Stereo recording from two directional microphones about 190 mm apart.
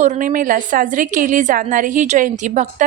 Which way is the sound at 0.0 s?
45° right (ahead or behind).